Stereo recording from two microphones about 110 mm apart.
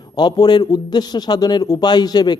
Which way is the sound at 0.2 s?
40° left (ahead or behind).